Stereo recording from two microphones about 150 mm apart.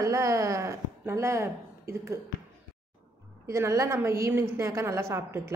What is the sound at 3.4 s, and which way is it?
A woman's voice, 20° right (ahead or behind).